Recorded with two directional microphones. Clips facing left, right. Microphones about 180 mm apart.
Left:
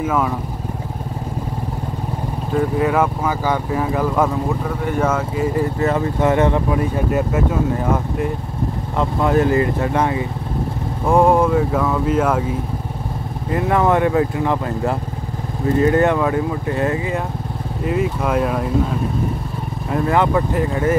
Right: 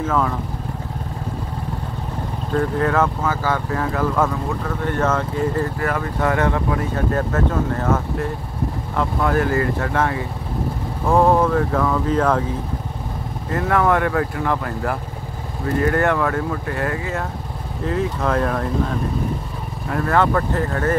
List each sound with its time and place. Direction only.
0.0 s speech: 10° left (ahead or behind)
2.5 s speech: 10° left (ahead or behind)
5.8 s speech: 20° left (ahead or behind); by 12.4 s 5° left (ahead or behind)
13.5 s speech: 20° left (ahead or behind)
17.8 s speech: 10° left (ahead or behind)
19.9 s speech: 15° left (ahead or behind)